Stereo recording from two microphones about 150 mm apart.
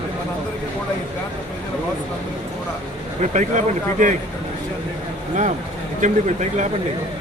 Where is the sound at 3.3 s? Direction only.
55° right (ahead or behind).